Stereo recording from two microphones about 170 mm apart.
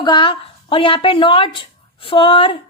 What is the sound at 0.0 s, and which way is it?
A woman's voice, 25° left (ahead or behind).